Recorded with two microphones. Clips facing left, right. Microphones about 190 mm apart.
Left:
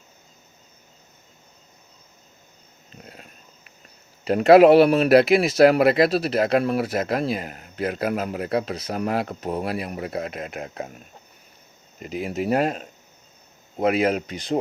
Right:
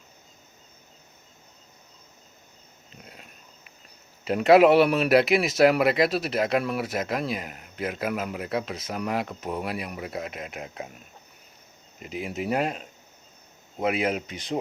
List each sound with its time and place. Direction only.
4.3 s speech: 35° left (ahead or behind)
10.0 s speech: 50° left (ahead or behind)
12.0 s speech: 40° left (ahead or behind)
13.8 s speech: 40° left (ahead or behind)